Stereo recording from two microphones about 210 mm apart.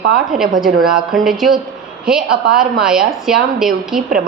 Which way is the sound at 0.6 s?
Centre (ahead or behind).